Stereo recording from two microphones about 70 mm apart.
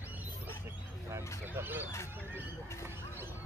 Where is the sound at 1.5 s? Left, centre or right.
Right.